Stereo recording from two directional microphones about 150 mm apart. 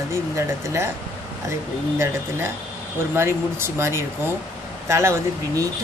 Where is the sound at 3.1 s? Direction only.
15° right (ahead or behind).